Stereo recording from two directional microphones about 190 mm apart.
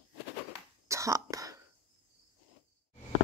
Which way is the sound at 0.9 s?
15° right (ahead or behind).